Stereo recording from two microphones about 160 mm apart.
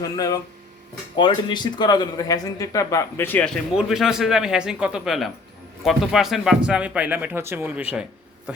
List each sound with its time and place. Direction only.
0.0 s speech: 20° left (ahead or behind); by 8.6 s 10° right (ahead or behind)